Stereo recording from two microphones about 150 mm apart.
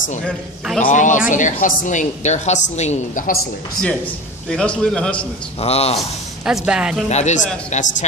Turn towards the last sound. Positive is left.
turn(degrees=50)  # may be behind; listen again after turning